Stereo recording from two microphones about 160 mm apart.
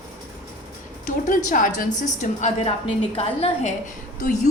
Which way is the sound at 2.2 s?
45° left (ahead or behind).